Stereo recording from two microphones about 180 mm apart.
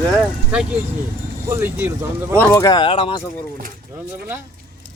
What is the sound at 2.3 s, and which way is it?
Speech, 20° left (ahead or behind).